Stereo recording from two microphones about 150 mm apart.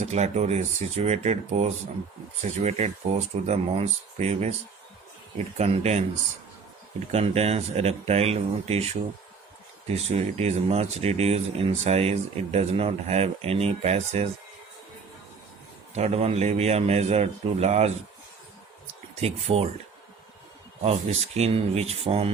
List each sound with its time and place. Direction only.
0.0 s speech: 50° right (ahead or behind)
5.5 s speech: 45° right (ahead or behind)
7.1 s speech: 45° right (ahead or behind)
16.0 s speech: 45° right (ahead or behind)
19.2 s speech: 40° right (ahead or behind)
20.8 s speech: 45° right (ahead or behind)